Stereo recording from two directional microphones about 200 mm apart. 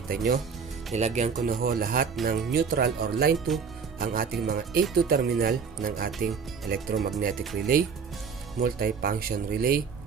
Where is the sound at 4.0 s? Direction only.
45° right (ahead or behind).